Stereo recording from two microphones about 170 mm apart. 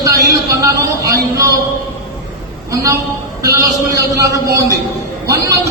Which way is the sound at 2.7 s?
20° right (ahead or behind).